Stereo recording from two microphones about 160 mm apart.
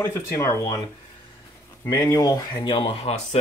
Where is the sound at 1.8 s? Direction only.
25° left (ahead or behind); by 3.4 s 40° left (ahead or behind).